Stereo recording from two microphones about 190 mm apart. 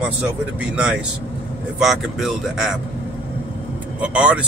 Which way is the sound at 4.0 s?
5° right (ahead or behind).